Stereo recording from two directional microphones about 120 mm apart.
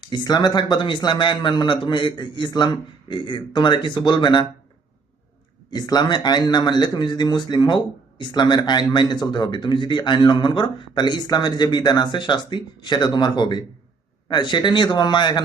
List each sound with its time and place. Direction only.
0.1 s speech: 35° left (ahead or behind)
5.7 s speech: 35° left (ahead or behind)